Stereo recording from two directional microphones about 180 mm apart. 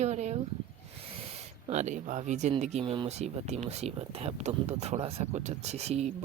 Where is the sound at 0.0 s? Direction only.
40° right (ahead or behind).